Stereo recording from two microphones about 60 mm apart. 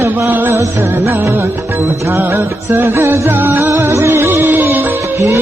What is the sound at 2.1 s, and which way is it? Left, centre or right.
Music, right.